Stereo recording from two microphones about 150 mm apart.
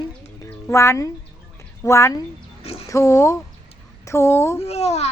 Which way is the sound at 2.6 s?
40° left (ahead or behind).